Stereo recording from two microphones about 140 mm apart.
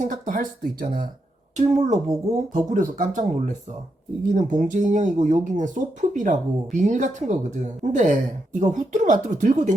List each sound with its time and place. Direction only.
0.0 s speech: 75° right (ahead or behind)
1.5 s speech: 55° right (ahead or behind)